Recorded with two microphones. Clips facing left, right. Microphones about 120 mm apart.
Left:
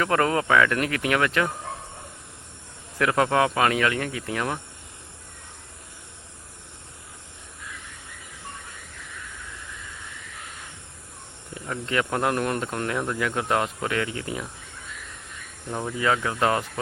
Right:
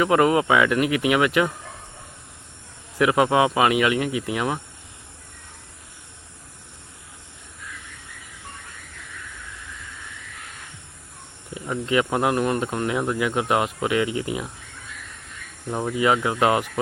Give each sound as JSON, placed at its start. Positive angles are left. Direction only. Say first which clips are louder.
{"t": 0.0, "sound": "speech", "louder": "right 4 dB", "side_deg": -10}
{"t": 3.0, "sound": "speech", "louder": "right 3 dB", "side_deg": -10}
{"t": 11.5, "sound": "speech", "louder": "right 4 dB", "side_deg": -10}
{"t": 15.7, "sound": "speech", "louder": "right 4 dB", "side_deg": -15}